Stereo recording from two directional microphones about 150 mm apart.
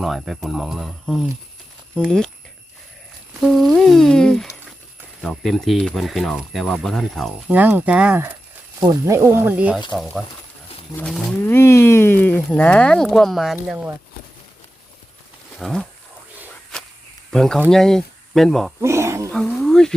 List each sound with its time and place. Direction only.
0.0 s speech: centre (ahead or behind)
3.4 s speech: centre (ahead or behind)
7.5 s speech: 10° right (ahead or behind)
8.8 s speech: 25° right (ahead or behind); by 11.5 s 5° left (ahead or behind)
11.5 s speech: 15° left (ahead or behind); by 13.7 s centre (ahead or behind)
15.5 s speech: centre (ahead or behind)
17.3 s speech: 5° left (ahead or behind)
18.8 s a sound: 20° right (ahead or behind)
19.3 s a sound: 5° left (ahead or behind)